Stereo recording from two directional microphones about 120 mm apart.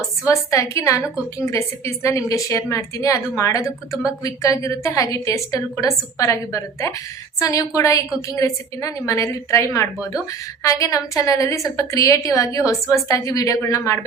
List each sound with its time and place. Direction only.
0.3 s a woman's voice: 25° left (ahead or behind)